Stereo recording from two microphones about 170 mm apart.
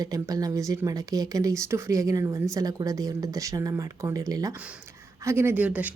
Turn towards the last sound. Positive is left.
turn(degrees=-10)  # may be behind; listen again after turning